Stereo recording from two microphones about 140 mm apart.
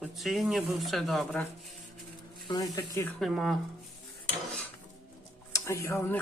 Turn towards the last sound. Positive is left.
turn(degrees=20)  # may be behind; listen again after turning